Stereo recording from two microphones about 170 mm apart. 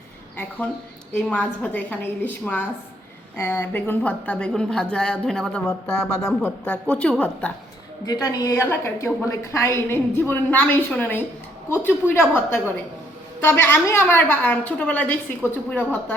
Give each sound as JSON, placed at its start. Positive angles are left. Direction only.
{"t": 1.1, "sound": "speech", "side_deg": 10}
{"t": 8.0, "sound": "speech", "side_deg": 20}
{"t": 13.4, "sound": "speech", "side_deg": 15}